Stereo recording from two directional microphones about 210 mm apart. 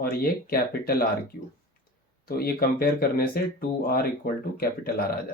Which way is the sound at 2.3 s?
45° left (ahead or behind).